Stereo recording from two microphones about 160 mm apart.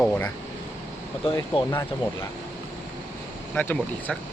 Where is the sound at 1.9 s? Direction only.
30° left (ahead or behind).